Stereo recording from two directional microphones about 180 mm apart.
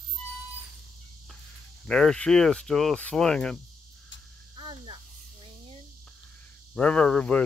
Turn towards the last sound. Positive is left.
turn(degrees=5)  # may be behind; listen again after turning